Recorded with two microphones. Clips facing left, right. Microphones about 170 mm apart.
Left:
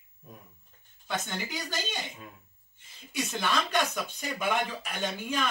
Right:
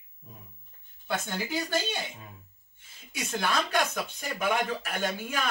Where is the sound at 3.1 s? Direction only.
5° right (ahead or behind).